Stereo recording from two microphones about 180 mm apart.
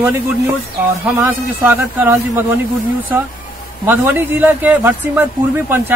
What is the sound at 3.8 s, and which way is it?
Speech, 10° right (ahead or behind).